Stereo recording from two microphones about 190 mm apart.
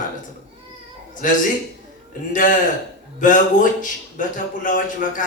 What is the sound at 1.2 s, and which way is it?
A man's voice, 45° left (ahead or behind).